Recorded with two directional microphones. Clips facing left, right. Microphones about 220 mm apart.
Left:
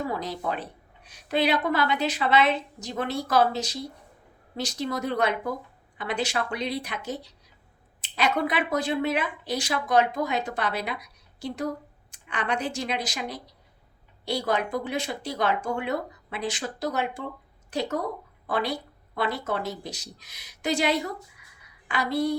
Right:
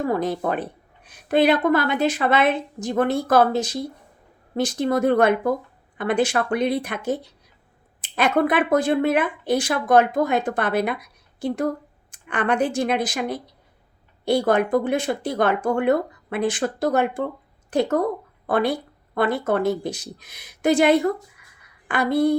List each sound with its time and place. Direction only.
0.0 s a woman's voice: 50° right (ahead or behind)